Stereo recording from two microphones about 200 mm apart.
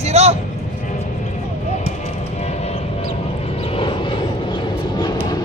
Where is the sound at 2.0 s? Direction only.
35° left (ahead or behind).